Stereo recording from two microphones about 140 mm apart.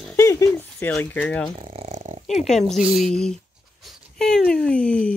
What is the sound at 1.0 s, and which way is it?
Speech, 10° left (ahead or behind).